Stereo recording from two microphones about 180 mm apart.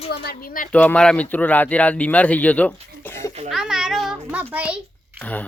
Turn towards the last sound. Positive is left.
turn(degrees=-5)  # may be behind; listen again after turning